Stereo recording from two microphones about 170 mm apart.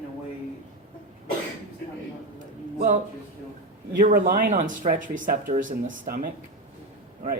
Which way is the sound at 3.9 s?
50° right (ahead or behind).